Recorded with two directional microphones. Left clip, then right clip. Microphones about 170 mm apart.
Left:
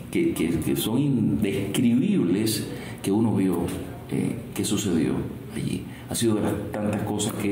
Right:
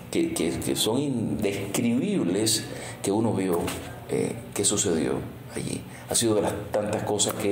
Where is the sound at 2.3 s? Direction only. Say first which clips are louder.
Even; 40° right (ahead or behind).